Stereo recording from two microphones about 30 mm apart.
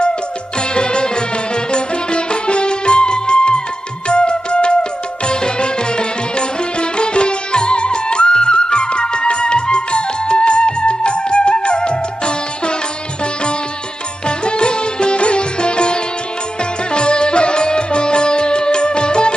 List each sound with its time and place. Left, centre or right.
0.7 s music: left
14.3 s music: left